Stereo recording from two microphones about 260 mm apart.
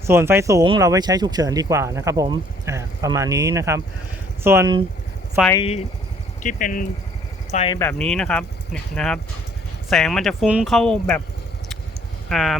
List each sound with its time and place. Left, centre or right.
0.1 s speech: centre
5.5 s speech: centre
6.4 s speech: left
7.8 s speech: centre
12.3 s speech: centre